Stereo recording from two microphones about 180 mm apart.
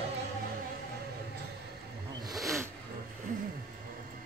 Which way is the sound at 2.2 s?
20° right (ahead or behind).